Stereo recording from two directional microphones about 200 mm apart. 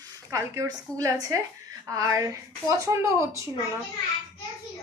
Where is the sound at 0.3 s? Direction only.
15° right (ahead or behind).